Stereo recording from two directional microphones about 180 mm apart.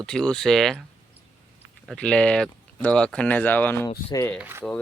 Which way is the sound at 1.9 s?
5° left (ahead or behind).